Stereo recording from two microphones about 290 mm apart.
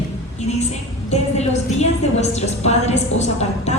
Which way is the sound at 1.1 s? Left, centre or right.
Left.